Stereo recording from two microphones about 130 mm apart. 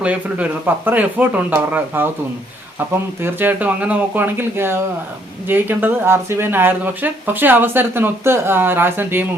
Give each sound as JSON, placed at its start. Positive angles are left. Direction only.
{"t": 0.0, "sound": "speech", "side_deg": -10}
{"t": 3.2, "sound": "speech", "side_deg": -15}